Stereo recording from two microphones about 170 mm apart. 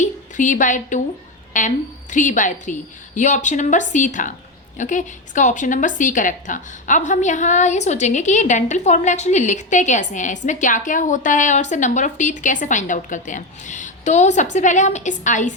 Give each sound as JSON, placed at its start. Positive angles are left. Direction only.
{"t": 0.0, "sound": "a woman's voice", "side_deg": 45}